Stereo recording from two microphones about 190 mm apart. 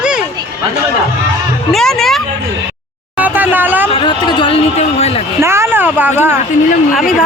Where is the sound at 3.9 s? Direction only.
25° left (ahead or behind).